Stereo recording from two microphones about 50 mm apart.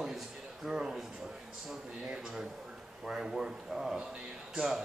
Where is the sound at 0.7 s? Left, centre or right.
Centre.